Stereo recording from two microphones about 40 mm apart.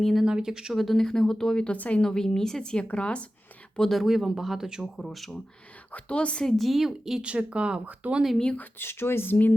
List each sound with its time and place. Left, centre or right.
0.0 s speech: centre
0.3 s speech: centre
0.7 s speech: centre
1.6 s a woman's voice: left
2.0 s speech: centre
2.8 s a woman's voice: left
3.8 s speech: centre
4.0 s speech: centre
4.9 s speech: centre
5.9 s a woman's voice: left
6.6 s speech: centre
7.2 s speech: right
8.0 s speech: right
8.8 s speech: left